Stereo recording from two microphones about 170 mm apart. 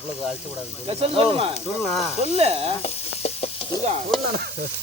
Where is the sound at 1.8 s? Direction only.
Centre (ahead or behind).